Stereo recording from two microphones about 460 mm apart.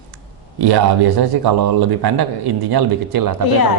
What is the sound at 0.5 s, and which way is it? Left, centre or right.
A man's voice, right.